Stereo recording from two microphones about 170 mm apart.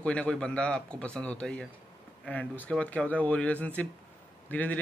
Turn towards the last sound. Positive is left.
turn(degrees=10)  # may be behind; listen again after turning